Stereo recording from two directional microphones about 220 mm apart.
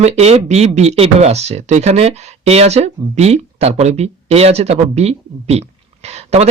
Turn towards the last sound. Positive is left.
turn(degrees=-30)  # may be behind; listen again after turning